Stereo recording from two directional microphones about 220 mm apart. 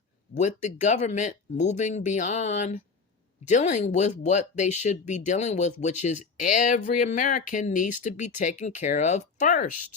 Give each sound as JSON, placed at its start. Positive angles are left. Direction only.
{"t": 0.3, "sound": "speech", "side_deg": 35}